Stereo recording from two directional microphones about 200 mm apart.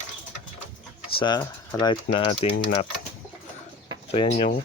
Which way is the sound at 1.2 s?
20° left (ahead or behind).